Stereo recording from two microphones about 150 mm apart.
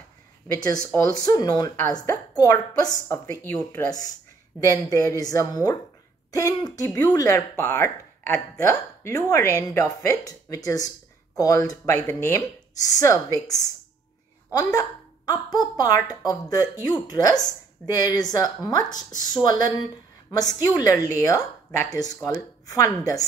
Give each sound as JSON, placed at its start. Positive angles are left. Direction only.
{"t": 0.9, "sound": "a woman's voice", "side_deg": 20}